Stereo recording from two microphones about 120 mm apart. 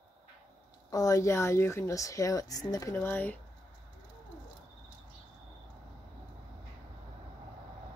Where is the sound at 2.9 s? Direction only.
15° left (ahead or behind).